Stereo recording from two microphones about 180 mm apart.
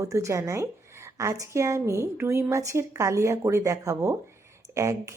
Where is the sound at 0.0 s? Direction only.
15° right (ahead or behind).